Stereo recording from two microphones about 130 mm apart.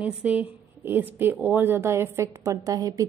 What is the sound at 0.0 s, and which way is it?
A woman's voice, 10° right (ahead or behind).